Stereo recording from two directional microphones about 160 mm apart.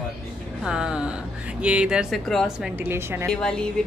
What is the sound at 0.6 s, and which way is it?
Speech, 5° right (ahead or behind).